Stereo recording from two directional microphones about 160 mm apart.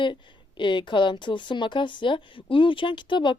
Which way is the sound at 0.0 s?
30° left (ahead or behind).